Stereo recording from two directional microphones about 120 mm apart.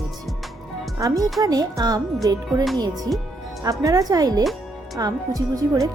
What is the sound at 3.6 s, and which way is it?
A woman's voice, 30° right (ahead or behind).